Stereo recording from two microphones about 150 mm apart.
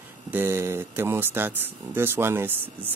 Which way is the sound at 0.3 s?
15° right (ahead or behind).